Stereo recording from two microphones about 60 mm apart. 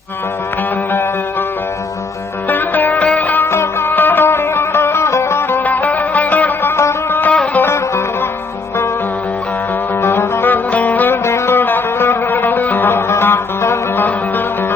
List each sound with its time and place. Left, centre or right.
2.5 s music: left
3.4 s music: left
6.7 s music: left
7.2 s music: left
7.6 s music: left
10.0 s music: left
11.1 s music: left